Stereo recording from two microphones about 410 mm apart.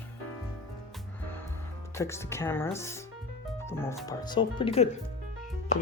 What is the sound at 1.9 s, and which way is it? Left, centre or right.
Speech, centre.